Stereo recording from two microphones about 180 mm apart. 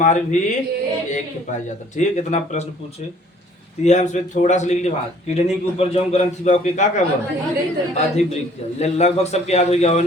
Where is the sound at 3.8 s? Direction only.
40° left (ahead or behind).